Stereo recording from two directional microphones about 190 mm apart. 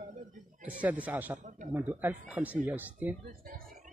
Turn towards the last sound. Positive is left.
turn(degrees=-45)  # may be behind; listen again after turning